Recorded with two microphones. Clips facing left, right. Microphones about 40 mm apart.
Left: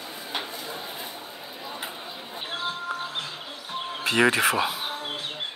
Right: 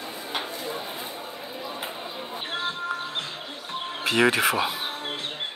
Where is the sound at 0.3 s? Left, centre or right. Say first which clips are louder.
Right 1 dB; right.